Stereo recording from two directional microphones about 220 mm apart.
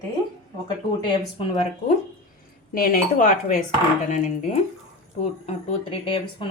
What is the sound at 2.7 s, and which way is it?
Speech, 40° left (ahead or behind).